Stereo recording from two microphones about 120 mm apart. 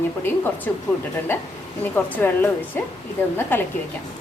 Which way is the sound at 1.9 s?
15° left (ahead or behind).